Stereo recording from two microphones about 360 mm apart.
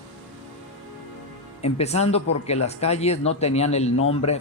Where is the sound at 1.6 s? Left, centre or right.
Centre.